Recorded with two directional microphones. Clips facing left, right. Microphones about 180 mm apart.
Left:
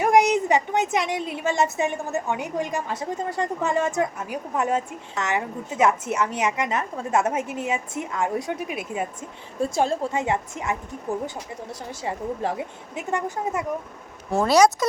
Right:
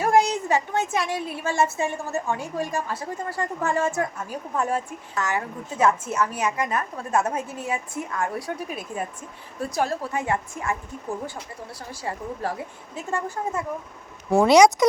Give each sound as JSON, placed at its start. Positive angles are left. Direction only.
{"t": 0.0, "sound": "a woman's voice", "side_deg": 20}
{"t": 14.3, "sound": "speech", "side_deg": -15}